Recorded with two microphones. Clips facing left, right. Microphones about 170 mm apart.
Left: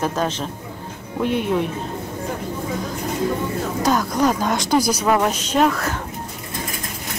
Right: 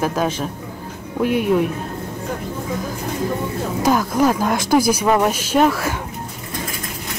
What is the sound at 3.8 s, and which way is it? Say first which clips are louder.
Speech: right 2 dB; 5° right (ahead or behind).